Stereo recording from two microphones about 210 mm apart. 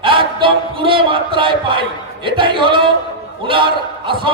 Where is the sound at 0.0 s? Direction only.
25° right (ahead or behind).